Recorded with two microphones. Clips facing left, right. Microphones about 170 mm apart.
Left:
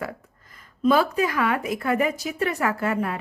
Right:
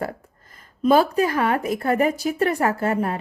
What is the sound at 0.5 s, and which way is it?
A woman's voice, 45° right (ahead or behind).